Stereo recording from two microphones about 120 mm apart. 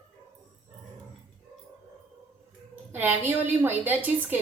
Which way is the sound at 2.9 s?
15° right (ahead or behind).